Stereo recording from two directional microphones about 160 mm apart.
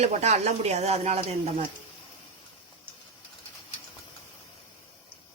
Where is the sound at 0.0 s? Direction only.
45° right (ahead or behind).